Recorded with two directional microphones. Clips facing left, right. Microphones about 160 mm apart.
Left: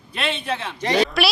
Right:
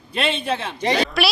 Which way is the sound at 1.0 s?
Centre (ahead or behind).